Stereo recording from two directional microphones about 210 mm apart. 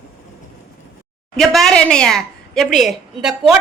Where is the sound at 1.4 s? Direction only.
Centre (ahead or behind).